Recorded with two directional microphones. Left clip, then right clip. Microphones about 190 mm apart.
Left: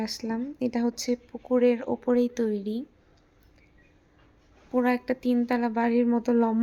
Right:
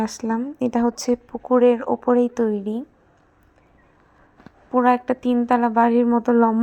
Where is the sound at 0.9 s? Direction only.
15° right (ahead or behind).